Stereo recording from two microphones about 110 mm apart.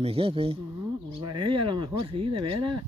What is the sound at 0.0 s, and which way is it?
Speech, 60° right (ahead or behind).